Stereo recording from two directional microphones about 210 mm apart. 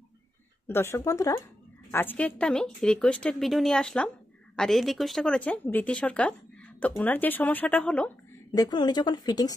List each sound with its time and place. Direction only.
0.7 s speech: 10° left (ahead or behind)
8.5 s speech: 20° left (ahead or behind)